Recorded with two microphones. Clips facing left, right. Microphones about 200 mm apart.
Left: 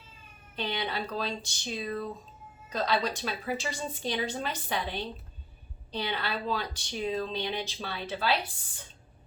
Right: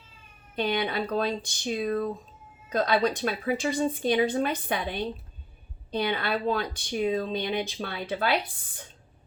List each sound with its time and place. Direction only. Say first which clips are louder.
0.5 s a woman's voice: right 6 dB; 55° right (ahead or behind)